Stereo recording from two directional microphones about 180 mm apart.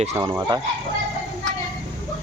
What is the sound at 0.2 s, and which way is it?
Speech, 25° right (ahead or behind).